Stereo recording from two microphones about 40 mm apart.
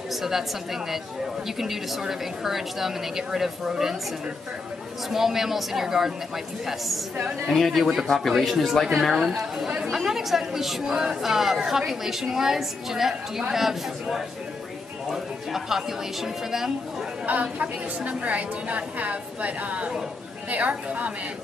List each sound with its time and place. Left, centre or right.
0.1 s a woman's voice: centre
5.1 s a woman's voice: centre
7.4 s a woman's voice: centre
17.3 s a woman's voice: right